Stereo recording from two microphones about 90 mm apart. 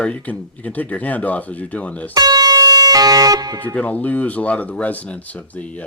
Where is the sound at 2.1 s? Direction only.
45° right (ahead or behind).